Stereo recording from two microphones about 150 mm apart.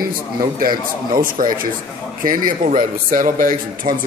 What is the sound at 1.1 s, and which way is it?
Speech, 70° right (ahead or behind).